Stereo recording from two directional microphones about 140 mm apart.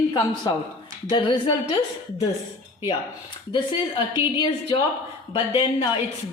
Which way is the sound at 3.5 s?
35° left (ahead or behind).